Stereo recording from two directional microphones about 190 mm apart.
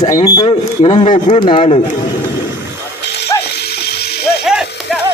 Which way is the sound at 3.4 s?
60° left (ahead or behind).